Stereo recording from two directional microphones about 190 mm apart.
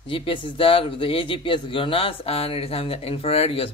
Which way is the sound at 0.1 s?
30° left (ahead or behind).